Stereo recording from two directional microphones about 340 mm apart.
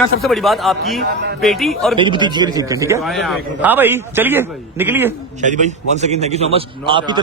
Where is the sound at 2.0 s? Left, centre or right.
Centre.